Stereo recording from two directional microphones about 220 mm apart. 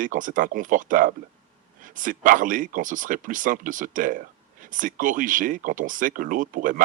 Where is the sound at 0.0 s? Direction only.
35° right (ahead or behind).